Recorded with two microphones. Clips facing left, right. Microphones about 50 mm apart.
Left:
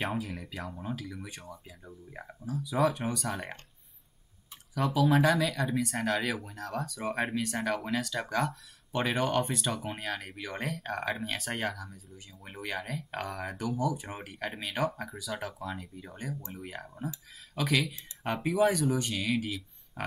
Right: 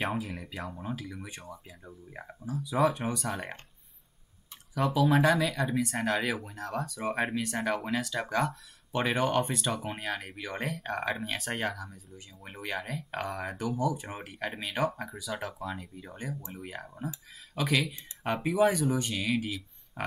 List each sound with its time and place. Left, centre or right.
0.0 s speech: centre
4.7 s speech: centre